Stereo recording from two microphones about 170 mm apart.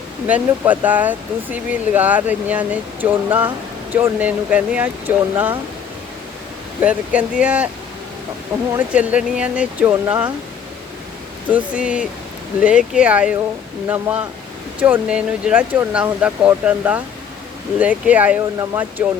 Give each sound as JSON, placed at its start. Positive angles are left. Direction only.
{"t": 0.3, "sound": "speech", "side_deg": -10}
{"t": 6.8, "sound": "speech", "side_deg": -10}
{"t": 8.9, "sound": "speech", "side_deg": -5}
{"t": 11.5, "sound": "speech", "side_deg": -5}